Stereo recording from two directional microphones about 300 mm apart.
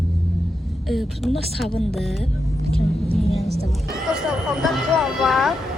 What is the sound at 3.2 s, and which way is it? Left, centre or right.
Vehicle, left.